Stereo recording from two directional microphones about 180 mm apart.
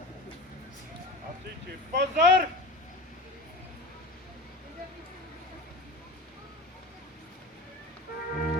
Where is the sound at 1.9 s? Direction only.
70° right (ahead or behind).